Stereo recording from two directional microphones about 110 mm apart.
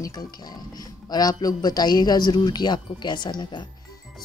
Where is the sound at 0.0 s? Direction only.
40° left (ahead or behind).